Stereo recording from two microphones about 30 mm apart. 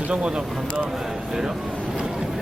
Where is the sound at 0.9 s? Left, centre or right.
Centre.